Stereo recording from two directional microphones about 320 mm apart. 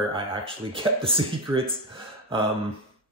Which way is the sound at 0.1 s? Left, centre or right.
Centre.